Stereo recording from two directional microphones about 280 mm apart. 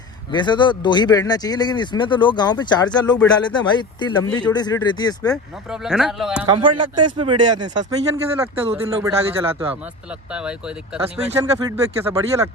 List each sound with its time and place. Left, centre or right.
0.3 s speech: centre
5.3 s speech: centre
6.5 s speech: centre
11.3 s speech: centre